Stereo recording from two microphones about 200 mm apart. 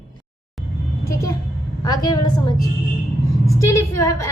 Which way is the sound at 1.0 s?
15° left (ahead or behind).